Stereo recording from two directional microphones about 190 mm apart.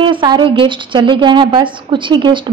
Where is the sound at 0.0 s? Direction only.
25° right (ahead or behind).